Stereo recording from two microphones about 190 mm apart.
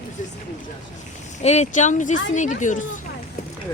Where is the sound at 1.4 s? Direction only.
35° left (ahead or behind).